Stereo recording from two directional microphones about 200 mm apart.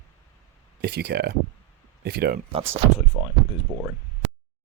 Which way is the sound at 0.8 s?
55° right (ahead or behind).